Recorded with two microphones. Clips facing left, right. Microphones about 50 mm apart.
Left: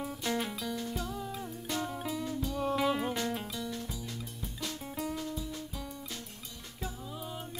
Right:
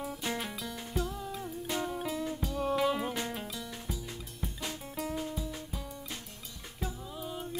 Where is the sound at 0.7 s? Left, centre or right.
Centre.